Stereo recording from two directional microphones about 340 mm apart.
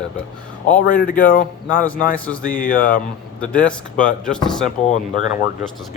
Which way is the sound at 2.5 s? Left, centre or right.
Left.